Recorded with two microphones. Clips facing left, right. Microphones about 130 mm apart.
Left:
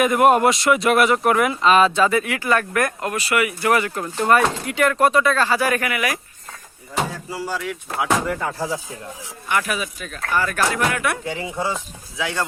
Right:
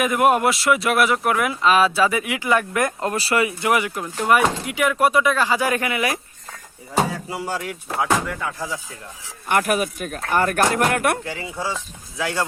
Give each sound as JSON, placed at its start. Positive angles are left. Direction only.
{"t": 0.0, "sound": "speech", "side_deg": 0}
{"t": 3.7, "sound": "speech", "side_deg": -15}
{"t": 8.4, "sound": "speech", "side_deg": 35}
{"t": 9.5, "sound": "speech", "side_deg": -50}
{"t": 11.3, "sound": "speech", "side_deg": 20}
{"t": 12.1, "sound": "speech", "side_deg": 0}